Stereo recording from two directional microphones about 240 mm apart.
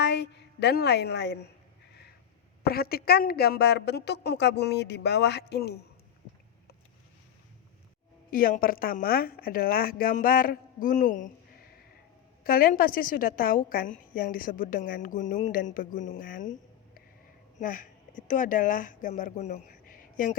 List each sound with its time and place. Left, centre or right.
0.0 s a woman's voice: left
2.6 s a woman's voice: left
8.3 s speech: left
12.4 s speech: left